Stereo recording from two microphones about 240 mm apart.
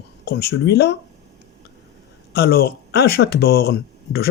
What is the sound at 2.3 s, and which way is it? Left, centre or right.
Speech, left.